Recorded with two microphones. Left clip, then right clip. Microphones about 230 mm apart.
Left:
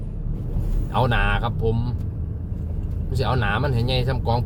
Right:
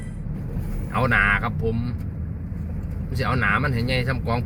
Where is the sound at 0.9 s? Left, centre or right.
Centre.